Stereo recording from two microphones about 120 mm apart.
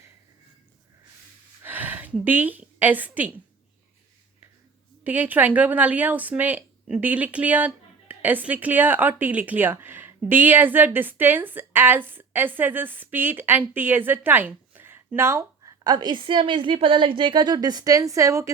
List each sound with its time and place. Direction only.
1.6 s a woman's voice: 15° right (ahead or behind)
5.0 s a woman's voice: 15° right (ahead or behind)